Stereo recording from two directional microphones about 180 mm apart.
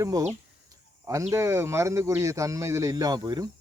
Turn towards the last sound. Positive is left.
turn(degrees=-20)  # may be behind; listen again after turning